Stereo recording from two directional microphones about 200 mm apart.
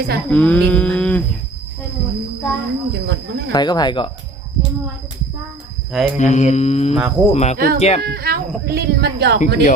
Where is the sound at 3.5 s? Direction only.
20° left (ahead or behind).